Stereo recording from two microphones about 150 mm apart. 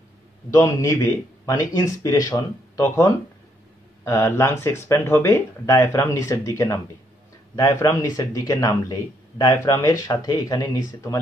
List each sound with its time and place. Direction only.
0.6 s speech: 20° left (ahead or behind)